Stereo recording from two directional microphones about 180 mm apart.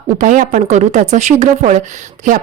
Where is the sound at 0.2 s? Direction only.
45° right (ahead or behind).